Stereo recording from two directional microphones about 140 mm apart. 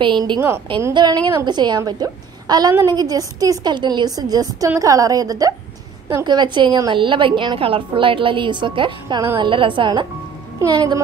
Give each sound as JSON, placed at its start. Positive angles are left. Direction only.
{"t": 0.0, "sound": "a woman's voice", "side_deg": -35}